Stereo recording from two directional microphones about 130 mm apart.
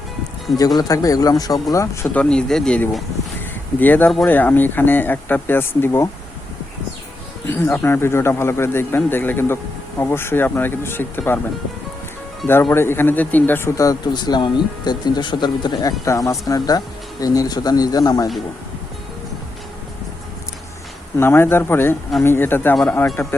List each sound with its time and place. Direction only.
0.8 s speech: 30° left (ahead or behind)
2.1 s speech: 5° left (ahead or behind)
7.4 s speech: 15° left (ahead or behind)
12.7 s speech: 20° left (ahead or behind)
21.2 s speech: 15° left (ahead or behind)